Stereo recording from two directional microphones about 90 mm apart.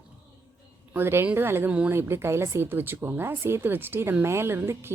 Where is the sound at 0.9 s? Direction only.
25° right (ahead or behind).